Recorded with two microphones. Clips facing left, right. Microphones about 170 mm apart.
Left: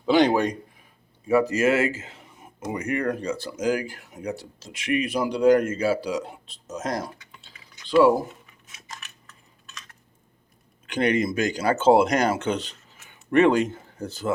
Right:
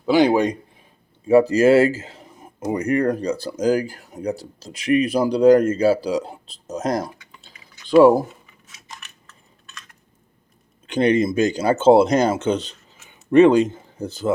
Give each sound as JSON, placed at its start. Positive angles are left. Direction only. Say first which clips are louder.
{"t": 0.0, "sound": "a man's voice", "louder": "right 3 dB", "side_deg": -5}
{"t": 1.3, "sound": "speech", "louder": "right 7 dB", "side_deg": -30}
{"t": 7.4, "sound": "typing", "louder": "right 2 dB", "side_deg": -50}
{"t": 8.9, "sound": "coin", "louder": "right 1 dB", "side_deg": 0}
{"t": 10.8, "sound": "speech", "louder": "right 5 dB", "side_deg": -25}